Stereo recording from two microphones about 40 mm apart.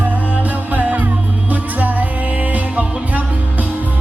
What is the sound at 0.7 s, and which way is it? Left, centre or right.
Music, right.